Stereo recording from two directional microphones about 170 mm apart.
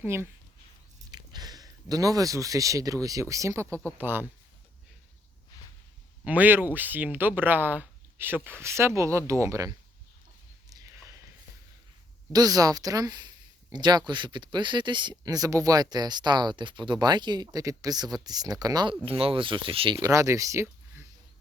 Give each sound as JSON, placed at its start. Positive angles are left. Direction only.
{"t": 0.0, "sound": "speech", "side_deg": -15}
{"t": 5.5, "sound": "a sound", "side_deg": 20}
{"t": 6.2, "sound": "speech", "side_deg": -10}
{"t": 10.7, "sound": "a sound", "side_deg": -20}
{"t": 12.3, "sound": "speech", "side_deg": -20}
{"t": 20.0, "sound": "speech", "side_deg": -20}